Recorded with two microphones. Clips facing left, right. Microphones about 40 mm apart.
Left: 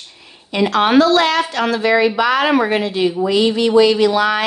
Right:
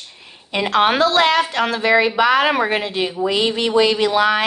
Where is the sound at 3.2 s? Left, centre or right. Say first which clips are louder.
Left 2 dB; right.